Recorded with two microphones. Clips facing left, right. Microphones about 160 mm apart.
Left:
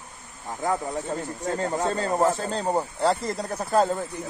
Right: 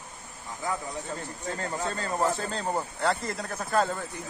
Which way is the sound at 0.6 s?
45° left (ahead or behind).